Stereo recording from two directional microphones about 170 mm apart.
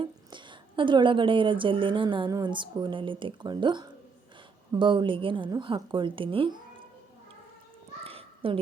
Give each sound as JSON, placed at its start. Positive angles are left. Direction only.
{"t": 0.0, "sound": "a woman's voice", "side_deg": -30}
{"t": 8.0, "sound": "babbling", "side_deg": -35}